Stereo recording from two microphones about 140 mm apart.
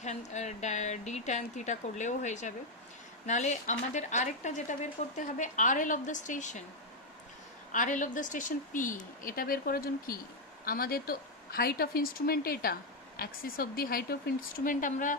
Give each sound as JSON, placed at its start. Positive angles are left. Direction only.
{"t": 0.0, "sound": "a woman's voice", "side_deg": 55}
{"t": 7.7, "sound": "a woman's voice", "side_deg": 65}